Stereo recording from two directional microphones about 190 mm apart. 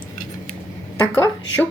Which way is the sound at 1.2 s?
10° left (ahead or behind).